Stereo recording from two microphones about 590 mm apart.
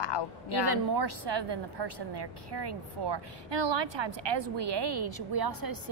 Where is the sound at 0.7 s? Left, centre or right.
Right.